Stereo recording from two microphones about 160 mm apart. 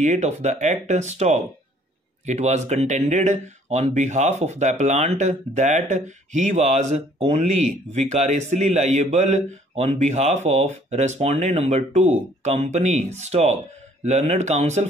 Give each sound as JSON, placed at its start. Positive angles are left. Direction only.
{"t": 0.0, "sound": "speech", "side_deg": -45}